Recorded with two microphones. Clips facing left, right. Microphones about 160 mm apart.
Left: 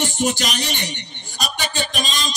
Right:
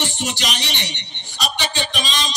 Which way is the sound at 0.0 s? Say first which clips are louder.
Left 4 dB; 45° left (ahead or behind).